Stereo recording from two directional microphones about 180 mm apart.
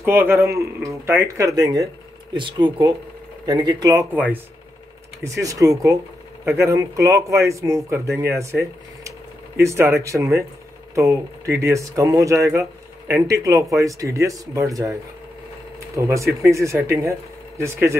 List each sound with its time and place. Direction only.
0.0 s speech: 10° right (ahead or behind)
5.4 s speech: 20° right (ahead or behind)
11.5 s speech: 15° right (ahead or behind)
16.0 s speech: 15° right (ahead or behind)